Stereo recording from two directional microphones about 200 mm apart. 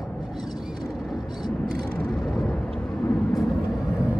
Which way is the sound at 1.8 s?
5° left (ahead or behind).